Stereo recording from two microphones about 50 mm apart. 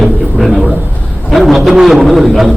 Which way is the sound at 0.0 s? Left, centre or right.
Centre.